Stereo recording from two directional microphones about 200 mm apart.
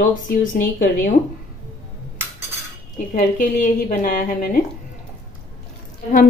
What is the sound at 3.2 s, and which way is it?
A woman's voice, 40° left (ahead or behind).